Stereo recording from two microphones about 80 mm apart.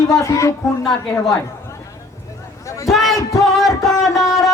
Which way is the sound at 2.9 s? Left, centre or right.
Centre.